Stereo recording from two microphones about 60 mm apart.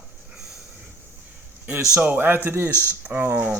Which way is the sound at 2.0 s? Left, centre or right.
Right.